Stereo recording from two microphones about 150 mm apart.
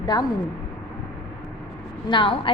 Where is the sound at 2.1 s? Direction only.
35° left (ahead or behind).